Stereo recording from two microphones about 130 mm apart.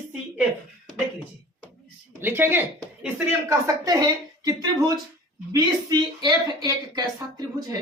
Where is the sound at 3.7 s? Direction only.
30° right (ahead or behind).